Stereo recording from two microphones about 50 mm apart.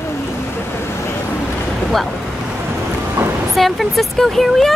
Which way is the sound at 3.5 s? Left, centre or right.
Centre.